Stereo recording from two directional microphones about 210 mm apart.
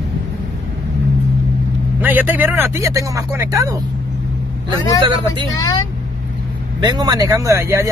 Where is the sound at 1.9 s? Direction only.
10° right (ahead or behind).